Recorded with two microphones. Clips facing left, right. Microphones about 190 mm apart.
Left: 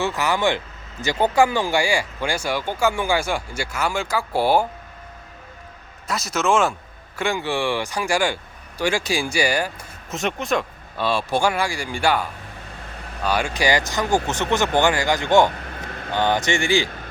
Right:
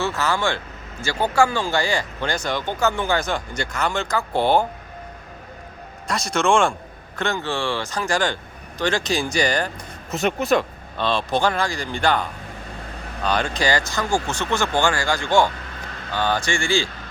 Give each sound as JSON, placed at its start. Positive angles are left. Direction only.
{"t": 0.0, "sound": "speech", "side_deg": 15}
{"t": 6.1, "sound": "a man's voice", "side_deg": 5}